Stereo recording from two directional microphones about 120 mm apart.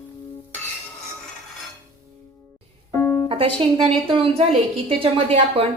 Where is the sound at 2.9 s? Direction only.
20° left (ahead or behind).